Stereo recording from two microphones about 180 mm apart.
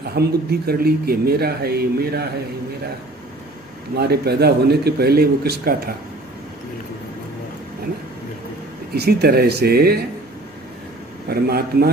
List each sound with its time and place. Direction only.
0.0 s speech: 60° right (ahead or behind)
3.9 s speech: 60° right (ahead or behind)
8.9 s speech: 60° right (ahead or behind)
11.2 s speech: 60° right (ahead or behind)